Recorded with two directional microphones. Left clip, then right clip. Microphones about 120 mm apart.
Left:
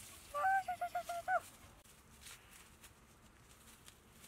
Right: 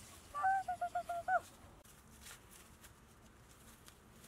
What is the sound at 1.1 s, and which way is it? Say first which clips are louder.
Owl: right 1 dB; 30° left (ahead or behind).